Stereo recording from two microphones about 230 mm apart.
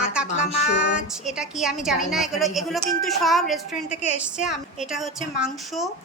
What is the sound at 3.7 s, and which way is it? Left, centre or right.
Speech, left.